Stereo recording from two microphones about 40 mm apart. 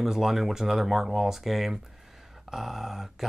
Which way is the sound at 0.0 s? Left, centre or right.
Centre.